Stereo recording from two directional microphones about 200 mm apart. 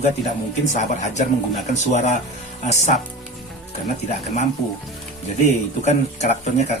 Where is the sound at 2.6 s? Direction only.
35° left (ahead or behind).